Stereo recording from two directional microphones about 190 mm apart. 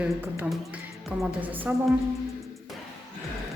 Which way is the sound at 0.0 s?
10° right (ahead or behind).